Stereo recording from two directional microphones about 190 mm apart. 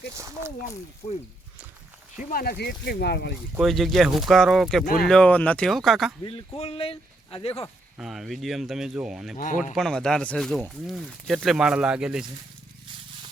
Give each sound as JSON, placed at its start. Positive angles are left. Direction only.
{"t": 0.2, "sound": "speech", "side_deg": -15}
{"t": 1.0, "sound": "speech", "side_deg": 30}
{"t": 2.1, "sound": "speech", "side_deg": 50}
{"t": 3.6, "sound": "speech", "side_deg": 0}
{"t": 6.2, "sound": "speech", "side_deg": 30}
{"t": 7.9, "sound": "speech", "side_deg": 0}
{"t": 9.4, "sound": "speech", "side_deg": 45}
{"t": 9.7, "sound": "speech", "side_deg": 0}